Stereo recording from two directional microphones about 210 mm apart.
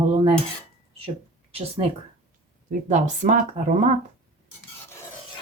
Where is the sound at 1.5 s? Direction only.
30° right (ahead or behind).